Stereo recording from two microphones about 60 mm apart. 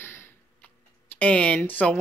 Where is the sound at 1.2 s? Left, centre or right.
Left.